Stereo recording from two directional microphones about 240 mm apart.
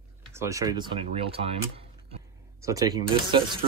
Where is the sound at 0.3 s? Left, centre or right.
Centre.